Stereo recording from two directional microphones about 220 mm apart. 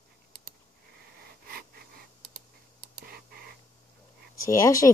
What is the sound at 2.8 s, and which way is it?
Computer keyboard, 45° right (ahead or behind).